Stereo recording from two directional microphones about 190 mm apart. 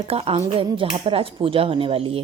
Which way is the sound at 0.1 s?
30° right (ahead or behind).